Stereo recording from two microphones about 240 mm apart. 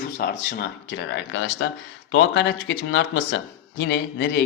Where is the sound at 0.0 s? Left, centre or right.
Left.